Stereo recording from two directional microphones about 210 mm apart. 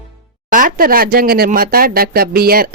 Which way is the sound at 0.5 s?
40° right (ahead or behind).